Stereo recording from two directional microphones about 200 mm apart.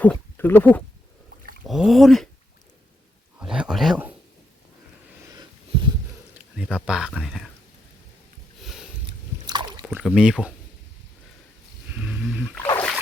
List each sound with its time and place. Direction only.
0.0 s speech: 10° left (ahead or behind)
1.6 s speech: centre (ahead or behind)
3.3 s speech: 5° right (ahead or behind)
6.6 s speech: 5° right (ahead or behind)
8.6 s sniff: centre (ahead or behind)
9.5 s a sound: 20° right (ahead or behind)
9.8 s speech: 5° right (ahead or behind)
11.9 s roaring cats: 5° right (ahead or behind)
12.5 s music: 10° left (ahead or behind)